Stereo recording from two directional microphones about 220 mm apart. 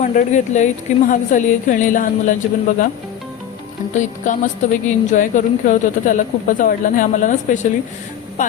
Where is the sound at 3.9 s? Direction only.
35° left (ahead or behind).